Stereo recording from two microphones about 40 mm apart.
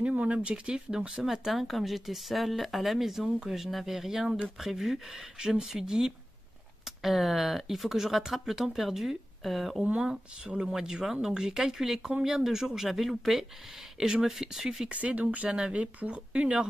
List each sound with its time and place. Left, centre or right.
0.0 s speech: right; by 1.3 s centre
1.3 s speech: centre
10.7 s speech: centre
14.9 s speech: right